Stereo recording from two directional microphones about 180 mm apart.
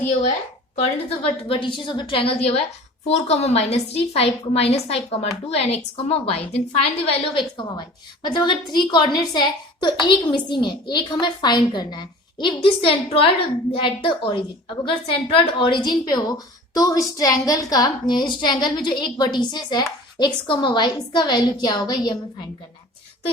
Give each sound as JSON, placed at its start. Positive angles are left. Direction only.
{"t": 1.5, "sound": "a woman's voice", "side_deg": 25}